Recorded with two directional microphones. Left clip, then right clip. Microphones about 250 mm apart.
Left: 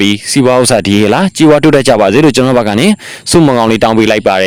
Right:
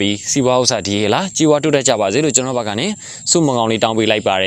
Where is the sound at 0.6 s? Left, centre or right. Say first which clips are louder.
Left 8 dB; left.